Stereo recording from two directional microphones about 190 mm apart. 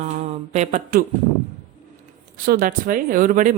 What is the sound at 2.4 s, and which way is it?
Speech, 50° right (ahead or behind).